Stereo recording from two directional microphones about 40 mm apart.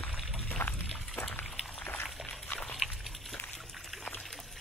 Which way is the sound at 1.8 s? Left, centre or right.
Left.